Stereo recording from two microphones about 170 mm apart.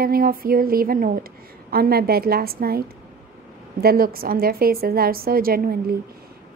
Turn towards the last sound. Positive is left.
turn(degrees=-60)  # may be behind; listen again after turning